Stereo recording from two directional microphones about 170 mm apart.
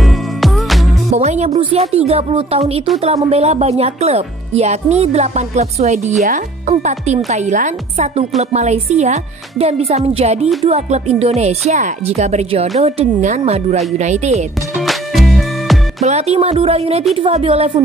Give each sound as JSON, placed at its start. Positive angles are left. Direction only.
{"t": 0.0, "sound": "music", "side_deg": 0}
{"t": 1.1, "sound": "a woman's voice", "side_deg": -40}
{"t": 14.9, "sound": "music", "side_deg": 0}
{"t": 16.0, "sound": "speech", "side_deg": -40}